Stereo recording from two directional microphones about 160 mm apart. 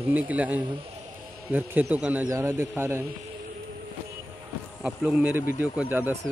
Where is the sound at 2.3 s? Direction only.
20° right (ahead or behind).